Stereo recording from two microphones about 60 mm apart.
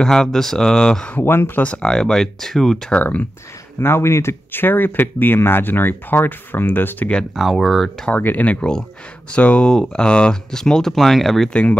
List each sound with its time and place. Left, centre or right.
0.0 s speech: centre
1.2 s speech: left
1.6 s speech: left
1.9 s speech: centre
2.9 s speech: left
3.8 s speech: left
7.3 s speech: centre
8.1 s speech: left
8.5 s speech: centre